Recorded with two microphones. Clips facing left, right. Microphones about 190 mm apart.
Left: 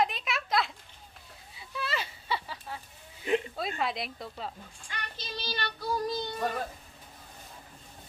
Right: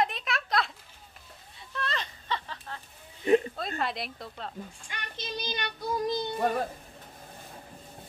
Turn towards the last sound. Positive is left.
turn(degrees=-20)  # may be behind; listen again after turning